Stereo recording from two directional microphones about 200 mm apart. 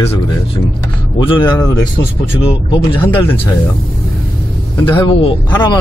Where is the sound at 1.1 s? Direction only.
25° left (ahead or behind).